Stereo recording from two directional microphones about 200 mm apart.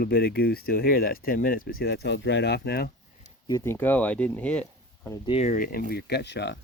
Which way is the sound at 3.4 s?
15° left (ahead or behind).